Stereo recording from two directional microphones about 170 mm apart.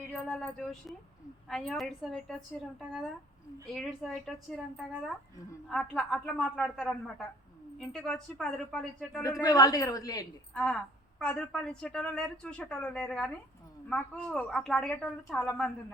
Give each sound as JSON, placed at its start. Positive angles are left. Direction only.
{"t": 0.1, "sound": "a woman's voice", "side_deg": 5}
{"t": 3.7, "sound": "a woman's voice", "side_deg": 0}
{"t": 9.4, "sound": "a woman's voice", "side_deg": 20}
{"t": 10.5, "sound": "a woman's voice", "side_deg": 5}